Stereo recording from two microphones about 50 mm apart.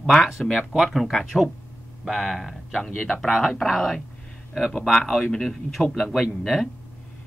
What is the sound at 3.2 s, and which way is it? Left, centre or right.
Speech, centre.